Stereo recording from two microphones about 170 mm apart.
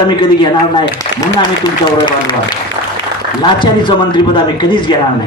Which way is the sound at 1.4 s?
25° left (ahead or behind).